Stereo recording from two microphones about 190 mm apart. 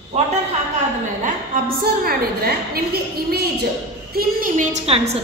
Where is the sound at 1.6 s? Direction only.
50° right (ahead or behind).